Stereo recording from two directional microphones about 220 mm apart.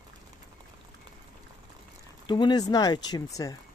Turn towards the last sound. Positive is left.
turn(degrees=15)  # may be behind; listen again after turning